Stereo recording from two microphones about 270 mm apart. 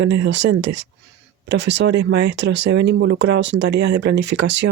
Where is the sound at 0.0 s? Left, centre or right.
Right.